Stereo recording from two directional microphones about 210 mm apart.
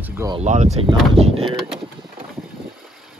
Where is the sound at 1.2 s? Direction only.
30° right (ahead or behind).